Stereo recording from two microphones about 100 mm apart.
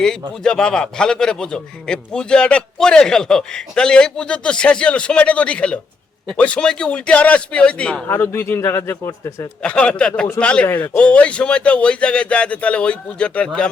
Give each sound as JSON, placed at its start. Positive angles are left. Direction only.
{"t": 0.0, "sound": "a man's voice", "side_deg": 5}
{"t": 8.0, "sound": "speech", "side_deg": 25}
{"t": 9.6, "sound": "a man's voice", "side_deg": 10}